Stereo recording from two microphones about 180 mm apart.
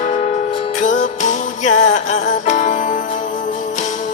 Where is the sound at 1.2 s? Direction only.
40° left (ahead or behind).